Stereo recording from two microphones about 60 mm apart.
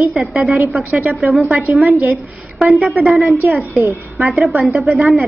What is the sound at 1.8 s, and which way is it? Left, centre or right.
Speech, right.